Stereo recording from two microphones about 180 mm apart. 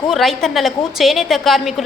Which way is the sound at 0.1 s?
Centre (ahead or behind).